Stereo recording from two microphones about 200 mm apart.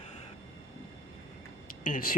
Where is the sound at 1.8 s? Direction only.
45° left (ahead or behind).